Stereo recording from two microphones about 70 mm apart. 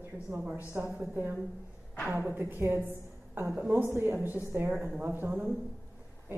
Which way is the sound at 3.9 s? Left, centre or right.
Right.